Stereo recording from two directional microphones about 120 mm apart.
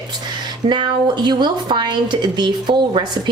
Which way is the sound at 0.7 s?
40° right (ahead or behind).